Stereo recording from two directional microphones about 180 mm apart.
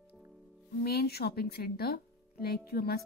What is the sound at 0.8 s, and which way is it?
Speech, 60° left (ahead or behind).